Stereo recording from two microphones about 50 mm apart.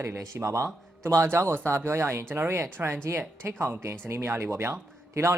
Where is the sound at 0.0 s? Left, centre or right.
Right.